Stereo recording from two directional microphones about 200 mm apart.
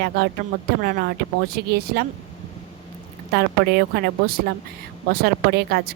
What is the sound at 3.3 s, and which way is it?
A woman's voice, 55° right (ahead or behind).